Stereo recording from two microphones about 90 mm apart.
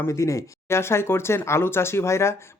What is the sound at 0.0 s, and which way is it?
Speech, 35° left (ahead or behind).